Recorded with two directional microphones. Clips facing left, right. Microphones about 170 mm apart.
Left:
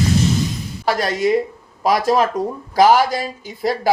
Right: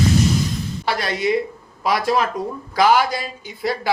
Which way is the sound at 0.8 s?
45° left (ahead or behind).